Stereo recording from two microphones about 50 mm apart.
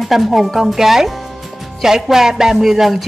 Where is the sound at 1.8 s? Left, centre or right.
Centre.